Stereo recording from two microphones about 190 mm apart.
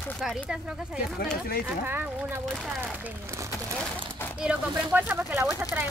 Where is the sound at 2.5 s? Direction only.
Centre (ahead or behind).